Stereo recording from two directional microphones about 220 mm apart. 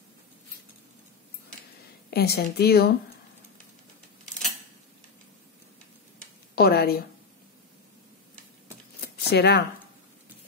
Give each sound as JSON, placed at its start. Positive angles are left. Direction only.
{"t": 2.0, "sound": "speech", "side_deg": 45}
{"t": 6.5, "sound": "a sound", "side_deg": 45}
{"t": 9.0, "sound": "shuffling cards", "side_deg": 45}